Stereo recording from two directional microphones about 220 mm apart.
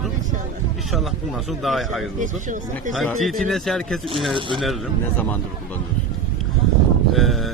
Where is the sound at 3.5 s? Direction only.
Centre (ahead or behind).